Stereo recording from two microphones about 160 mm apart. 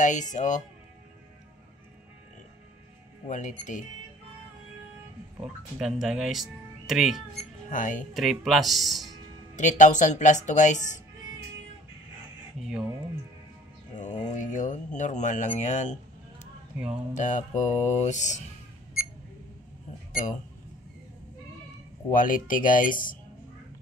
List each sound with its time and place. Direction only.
0.0 s speech: 50° left (ahead or behind)
3.3 s speech: 50° left (ahead or behind)
5.4 s speech: 5° right (ahead or behind)
7.7 s speech: 55° left (ahead or behind)
8.1 s speech: centre (ahead or behind)
9.6 s speech: 50° left (ahead or behind)
13.9 s speech: 50° left (ahead or behind)
16.7 s speech: 5° right (ahead or behind)
17.1 s speech: 50° left (ahead or behind)
22.1 s speech: 60° left (ahead or behind)